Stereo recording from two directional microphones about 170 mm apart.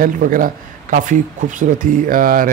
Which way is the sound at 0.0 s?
55° right (ahead or behind).